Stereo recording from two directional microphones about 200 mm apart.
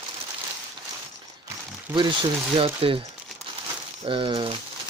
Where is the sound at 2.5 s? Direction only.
25° right (ahead or behind).